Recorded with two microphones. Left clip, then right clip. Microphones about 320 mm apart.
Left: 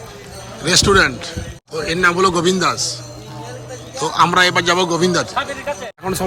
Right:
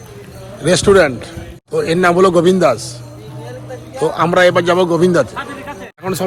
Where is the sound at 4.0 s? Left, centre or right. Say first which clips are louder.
Right 2 dB; centre.